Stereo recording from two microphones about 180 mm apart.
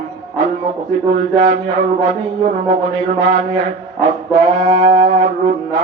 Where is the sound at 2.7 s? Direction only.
40° right (ahead or behind).